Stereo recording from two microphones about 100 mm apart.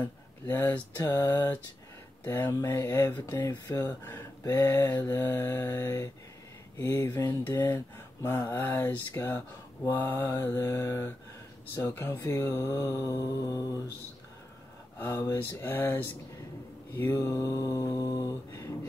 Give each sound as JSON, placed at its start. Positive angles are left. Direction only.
{"t": 0.5, "sound": "speech", "side_deg": 15}
{"t": 1.1, "sound": "mantra", "side_deg": 40}
{"t": 2.2, "sound": "speech", "side_deg": 20}
{"t": 3.2, "sound": "mantra", "side_deg": 35}
{"t": 3.8, "sound": "speech", "side_deg": 20}
{"t": 13.0, "sound": "mantra", "side_deg": 35}
{"t": 15.0, "sound": "speech", "side_deg": 20}
{"t": 16.9, "sound": "mantra", "side_deg": 25}